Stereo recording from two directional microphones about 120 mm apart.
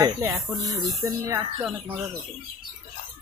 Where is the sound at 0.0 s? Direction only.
30° right (ahead or behind).